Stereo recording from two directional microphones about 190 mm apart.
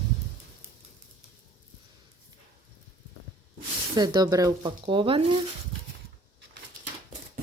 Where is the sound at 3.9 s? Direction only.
20° right (ahead or behind).